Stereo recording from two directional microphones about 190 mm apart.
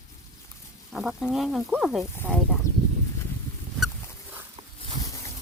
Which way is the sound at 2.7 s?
15° left (ahead or behind).